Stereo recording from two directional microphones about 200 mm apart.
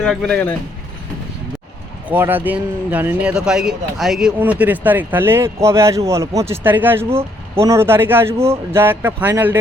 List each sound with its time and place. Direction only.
0.0 s speech: 5° left (ahead or behind)
2.0 s speech: 10° right (ahead or behind)